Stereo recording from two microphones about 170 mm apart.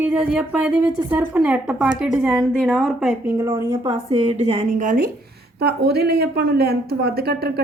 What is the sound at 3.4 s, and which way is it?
Speech, 15° right (ahead or behind).